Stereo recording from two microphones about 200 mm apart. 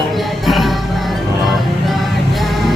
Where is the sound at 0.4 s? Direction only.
Centre (ahead or behind).